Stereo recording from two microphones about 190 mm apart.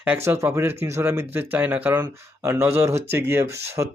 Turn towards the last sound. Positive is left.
turn(degrees=-15)  # may be behind; listen again after turning